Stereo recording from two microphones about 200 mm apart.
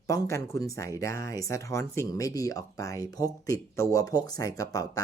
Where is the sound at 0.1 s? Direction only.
15° left (ahead or behind).